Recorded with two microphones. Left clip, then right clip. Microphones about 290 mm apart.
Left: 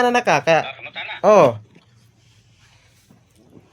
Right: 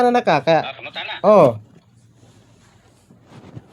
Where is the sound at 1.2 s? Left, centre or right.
Left.